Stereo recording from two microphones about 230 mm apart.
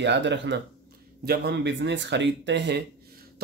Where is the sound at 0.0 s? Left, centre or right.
Right.